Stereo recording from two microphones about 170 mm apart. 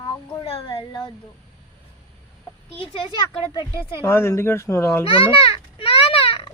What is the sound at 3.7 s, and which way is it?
Speech, 15° right (ahead or behind).